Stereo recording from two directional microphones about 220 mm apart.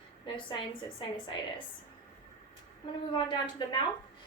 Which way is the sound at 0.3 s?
20° left (ahead or behind).